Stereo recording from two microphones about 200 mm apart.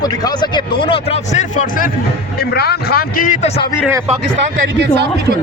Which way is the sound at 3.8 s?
10° right (ahead or behind).